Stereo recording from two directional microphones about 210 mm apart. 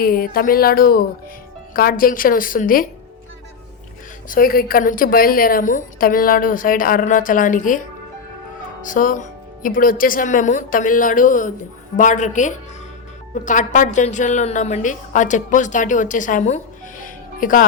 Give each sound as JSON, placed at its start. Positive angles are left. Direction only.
{"t": 0.0, "sound": "a woman's voice", "side_deg": 45}
{"t": 4.3, "sound": "a woman's voice", "side_deg": 45}
{"t": 8.8, "sound": "a woman's voice", "side_deg": 40}
{"t": 17.0, "sound": "music", "side_deg": 40}